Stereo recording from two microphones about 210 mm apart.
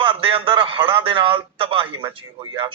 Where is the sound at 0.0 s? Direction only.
25° right (ahead or behind).